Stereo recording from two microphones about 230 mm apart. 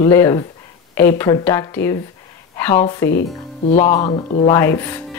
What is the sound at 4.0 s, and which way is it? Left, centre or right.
Speech, centre.